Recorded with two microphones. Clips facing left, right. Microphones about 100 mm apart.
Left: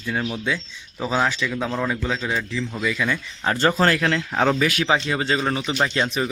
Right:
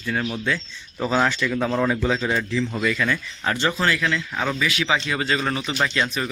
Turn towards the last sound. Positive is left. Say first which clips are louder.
# left 1 dB
turn(degrees=25)  # may be behind; listen again after turning